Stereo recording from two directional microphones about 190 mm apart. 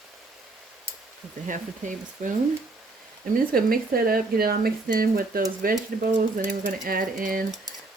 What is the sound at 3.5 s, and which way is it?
A woman's voice, 50° right (ahead or behind).